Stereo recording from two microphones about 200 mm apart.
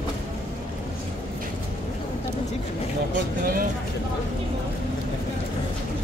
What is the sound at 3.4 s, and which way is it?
Vehicle, 45° right (ahead or behind).